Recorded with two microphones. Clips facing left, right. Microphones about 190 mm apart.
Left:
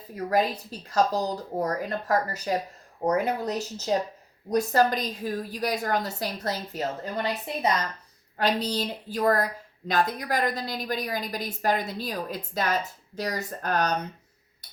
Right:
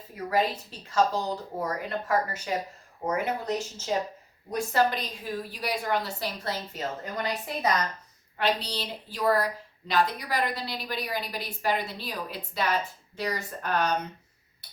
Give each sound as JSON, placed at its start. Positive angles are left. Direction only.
{"t": 0.3, "sound": "a woman's voice", "side_deg": 40}
{"t": 8.4, "sound": "a woman's voice", "side_deg": 45}